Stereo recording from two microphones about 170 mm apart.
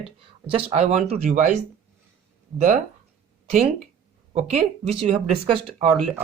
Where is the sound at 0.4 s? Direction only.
35° right (ahead or behind).